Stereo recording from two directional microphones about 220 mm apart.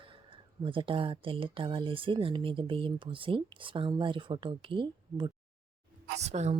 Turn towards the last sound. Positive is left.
turn(degrees=-30)  # may be behind; listen again after turning